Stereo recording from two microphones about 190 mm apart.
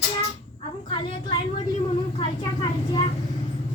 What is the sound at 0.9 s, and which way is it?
A woman's voice, 25° left (ahead or behind).